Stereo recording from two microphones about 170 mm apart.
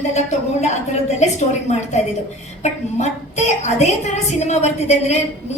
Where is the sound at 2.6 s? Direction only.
45° left (ahead or behind).